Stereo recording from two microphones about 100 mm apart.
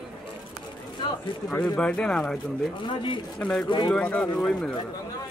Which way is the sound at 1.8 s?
10° left (ahead or behind).